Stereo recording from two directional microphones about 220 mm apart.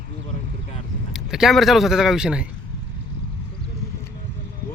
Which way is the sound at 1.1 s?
Centre (ahead or behind).